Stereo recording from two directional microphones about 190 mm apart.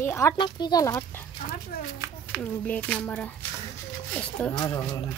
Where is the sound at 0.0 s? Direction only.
15° left (ahead or behind).